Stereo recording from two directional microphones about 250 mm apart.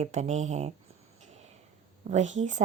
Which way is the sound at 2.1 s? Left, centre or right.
Right.